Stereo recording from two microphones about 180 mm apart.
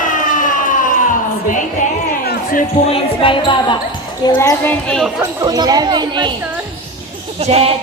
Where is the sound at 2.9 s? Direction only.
30° left (ahead or behind).